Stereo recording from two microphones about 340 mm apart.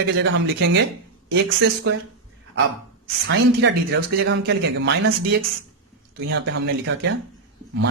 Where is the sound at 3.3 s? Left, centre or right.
Right.